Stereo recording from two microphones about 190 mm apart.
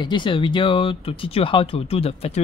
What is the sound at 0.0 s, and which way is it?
Speech, 25° left (ahead or behind).